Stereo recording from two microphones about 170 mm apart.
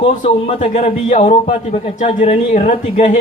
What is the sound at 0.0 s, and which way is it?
A woman's voice, 35° left (ahead or behind).